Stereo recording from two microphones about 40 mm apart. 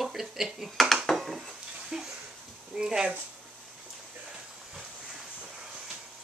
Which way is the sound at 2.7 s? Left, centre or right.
Centre.